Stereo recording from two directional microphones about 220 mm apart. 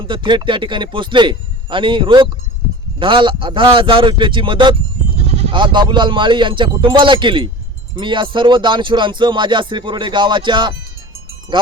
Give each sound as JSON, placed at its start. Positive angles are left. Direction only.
{"t": 0.0, "sound": "speech", "side_deg": -20}